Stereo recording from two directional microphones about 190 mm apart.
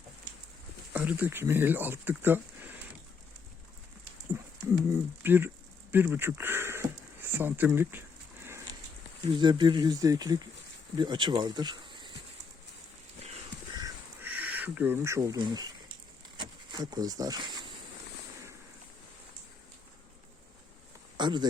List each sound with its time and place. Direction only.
0.9 s speech: 5° right (ahead or behind)
5.2 s speech: 10° right (ahead or behind)
5.9 s a sound: 10° right (ahead or behind)
9.4 s speech: 25° right (ahead or behind)
13.7 s a sound: 15° right (ahead or behind)
16.4 s speech: 20° right (ahead or behind)
21.2 s speech: 25° right (ahead or behind)